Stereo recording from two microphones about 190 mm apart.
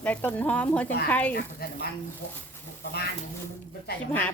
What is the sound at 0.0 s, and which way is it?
Speech, 10° left (ahead or behind).